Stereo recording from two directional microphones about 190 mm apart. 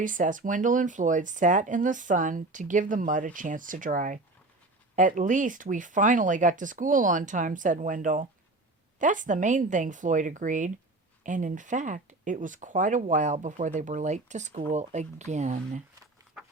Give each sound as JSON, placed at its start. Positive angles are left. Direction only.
{"t": 0.0, "sound": "speech", "side_deg": -45}